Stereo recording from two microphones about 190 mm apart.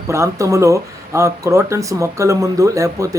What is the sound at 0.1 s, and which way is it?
Speech, 15° right (ahead or behind).